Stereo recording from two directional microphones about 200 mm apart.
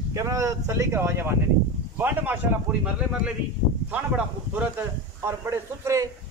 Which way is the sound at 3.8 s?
5° right (ahead or behind).